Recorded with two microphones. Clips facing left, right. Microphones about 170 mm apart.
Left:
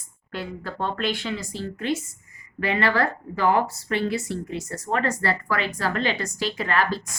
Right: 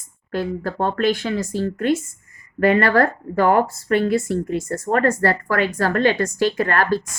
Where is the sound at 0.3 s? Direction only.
45° right (ahead or behind).